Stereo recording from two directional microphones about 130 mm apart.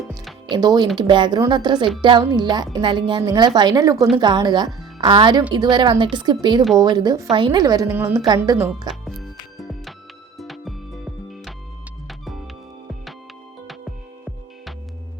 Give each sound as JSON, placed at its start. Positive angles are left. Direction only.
{"t": 0.5, "sound": "speech", "side_deg": -30}
{"t": 3.9, "sound": "a woman's voice", "side_deg": 0}
{"t": 4.2, "sound": "a woman's voice", "side_deg": -35}
{"t": 9.6, "sound": "music", "side_deg": 0}
{"t": 13.7, "sound": "music", "side_deg": 0}